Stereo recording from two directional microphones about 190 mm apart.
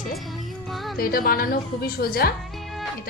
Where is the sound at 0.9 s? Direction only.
50° left (ahead or behind).